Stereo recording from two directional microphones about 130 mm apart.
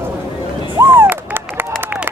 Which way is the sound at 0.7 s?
20° right (ahead or behind).